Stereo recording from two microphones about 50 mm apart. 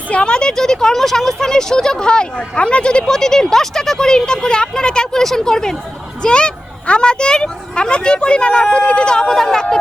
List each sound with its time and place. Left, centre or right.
0.1 s speech: centre